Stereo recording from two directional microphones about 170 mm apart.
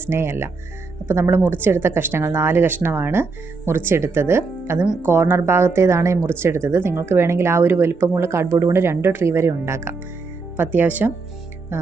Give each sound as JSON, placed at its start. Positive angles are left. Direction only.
{"t": 0.0, "sound": "speech", "side_deg": -15}